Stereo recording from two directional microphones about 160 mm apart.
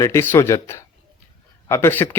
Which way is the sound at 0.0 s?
15° left (ahead or behind).